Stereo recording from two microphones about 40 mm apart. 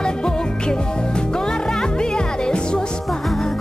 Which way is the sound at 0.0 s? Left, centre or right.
Centre.